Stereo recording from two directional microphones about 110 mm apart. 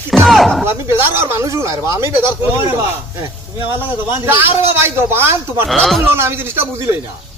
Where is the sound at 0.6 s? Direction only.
20° right (ahead or behind).